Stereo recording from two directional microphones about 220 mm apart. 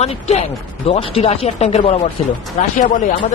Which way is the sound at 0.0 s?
30° left (ahead or behind).